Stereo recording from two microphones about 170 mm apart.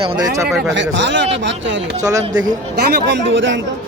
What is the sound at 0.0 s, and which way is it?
Speech, 30° right (ahead or behind).